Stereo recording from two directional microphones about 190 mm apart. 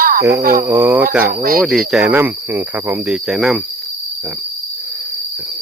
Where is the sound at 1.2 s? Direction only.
50° right (ahead or behind).